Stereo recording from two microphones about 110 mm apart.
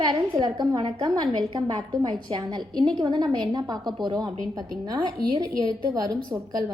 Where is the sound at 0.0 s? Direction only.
35° right (ahead or behind).